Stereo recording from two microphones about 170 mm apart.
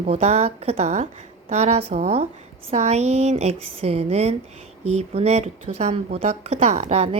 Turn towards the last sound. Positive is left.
turn(degrees=-40)  # may be behind; listen again after turning